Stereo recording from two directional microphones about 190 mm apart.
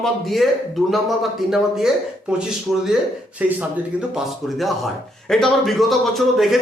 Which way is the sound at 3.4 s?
10° right (ahead or behind).